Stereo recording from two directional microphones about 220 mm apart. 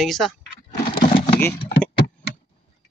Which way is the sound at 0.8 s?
20° left (ahead or behind).